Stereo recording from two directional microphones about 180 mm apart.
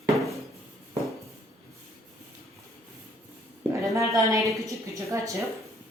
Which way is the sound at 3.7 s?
15° right (ahead or behind).